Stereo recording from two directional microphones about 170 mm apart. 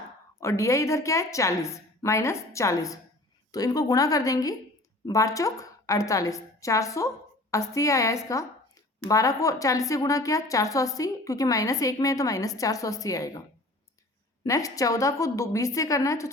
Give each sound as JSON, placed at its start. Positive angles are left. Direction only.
{"t": 0.3, "sound": "a woman's voice", "side_deg": 15}
{"t": 14.4, "sound": "a woman's voice", "side_deg": 20}